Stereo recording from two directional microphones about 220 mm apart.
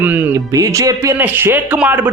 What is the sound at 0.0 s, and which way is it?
Speech, 10° right (ahead or behind).